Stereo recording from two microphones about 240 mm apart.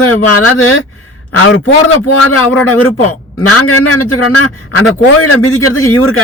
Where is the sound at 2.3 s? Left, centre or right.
Left.